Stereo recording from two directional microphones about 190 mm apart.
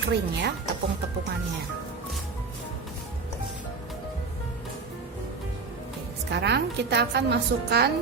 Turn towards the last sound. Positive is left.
turn(degrees=-60)  # may be behind; listen again after turning